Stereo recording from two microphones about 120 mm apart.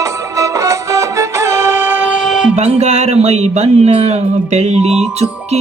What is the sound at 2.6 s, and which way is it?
Music, 65° right (ahead or behind).